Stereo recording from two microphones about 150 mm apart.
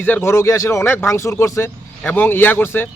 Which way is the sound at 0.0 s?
15° left (ahead or behind).